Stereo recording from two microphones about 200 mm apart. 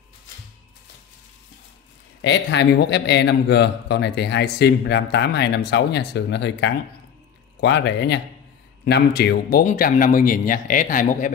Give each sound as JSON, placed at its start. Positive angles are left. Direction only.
{"t": 2.2, "sound": "a man's voice", "side_deg": 60}